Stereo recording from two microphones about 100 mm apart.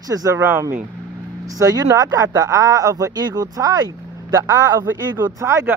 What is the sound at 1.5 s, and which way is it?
A man's voice, 35° right (ahead or behind).